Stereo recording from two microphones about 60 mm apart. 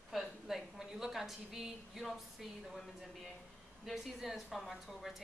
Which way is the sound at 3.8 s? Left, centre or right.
Centre.